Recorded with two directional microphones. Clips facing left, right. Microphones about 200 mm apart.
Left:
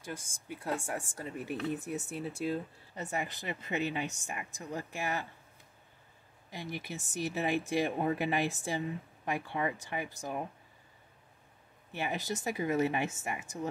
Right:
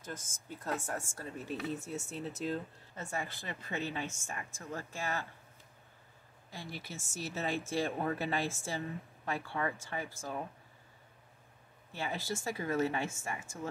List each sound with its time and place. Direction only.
0.0 s speech: 10° left (ahead or behind)
6.5 s speech: 15° left (ahead or behind)
11.9 s speech: 20° left (ahead or behind)